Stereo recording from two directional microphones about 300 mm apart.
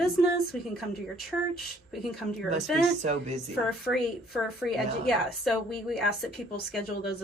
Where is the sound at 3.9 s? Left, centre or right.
Centre.